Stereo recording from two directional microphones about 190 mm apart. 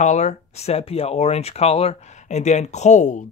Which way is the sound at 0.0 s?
40° left (ahead or behind).